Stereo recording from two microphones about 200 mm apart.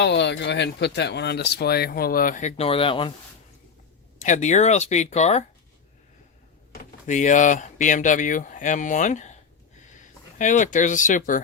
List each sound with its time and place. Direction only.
0.0 s speech: 60° left (ahead or behind); by 3.1 s 25° left (ahead or behind)
4.2 s speech: 35° left (ahead or behind)
7.1 s speech: 40° left (ahead or behind)
10.3 s speech: 40° left (ahead or behind)